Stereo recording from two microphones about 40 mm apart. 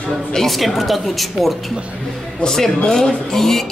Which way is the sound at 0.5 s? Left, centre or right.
Centre.